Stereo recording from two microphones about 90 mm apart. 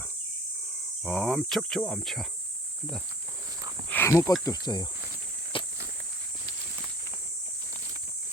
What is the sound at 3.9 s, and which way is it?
Speech, 30° left (ahead or behind).